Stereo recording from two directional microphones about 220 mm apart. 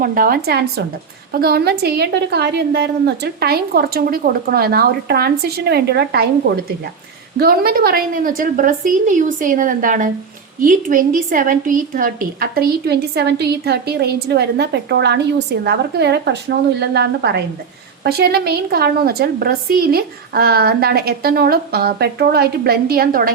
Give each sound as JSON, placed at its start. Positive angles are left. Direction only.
{"t": 0.0, "sound": "a woman's voice", "side_deg": -40}
{"t": 7.3, "sound": "a woman's voice", "side_deg": -45}